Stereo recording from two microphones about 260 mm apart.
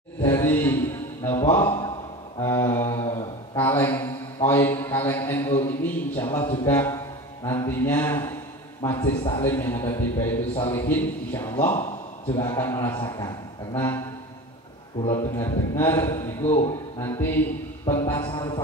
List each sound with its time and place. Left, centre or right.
0.2 s a man's voice: centre
11.6 s a man's voice: left
12.4 s a man's voice: centre
15.0 s a man's voice: left
15.3 s a man's voice: centre
16.4 s a man's voice: left
17.0 s a man's voice: centre